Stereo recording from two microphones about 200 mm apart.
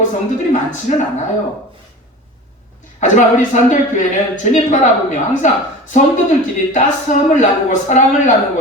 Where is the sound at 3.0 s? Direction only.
35° left (ahead or behind).